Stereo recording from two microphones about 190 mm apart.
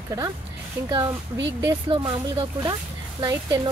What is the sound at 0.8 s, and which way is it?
Speech, 20° right (ahead or behind).